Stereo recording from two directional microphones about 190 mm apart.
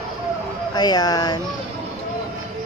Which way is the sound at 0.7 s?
20° left (ahead or behind).